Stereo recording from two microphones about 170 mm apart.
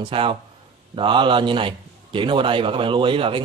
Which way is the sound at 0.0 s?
30° right (ahead or behind).